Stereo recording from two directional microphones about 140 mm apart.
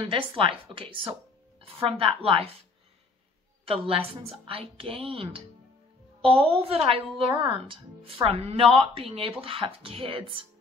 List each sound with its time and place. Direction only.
0.4 s a woman's voice: 40° right (ahead or behind)
3.6 s a woman's voice: 45° right (ahead or behind)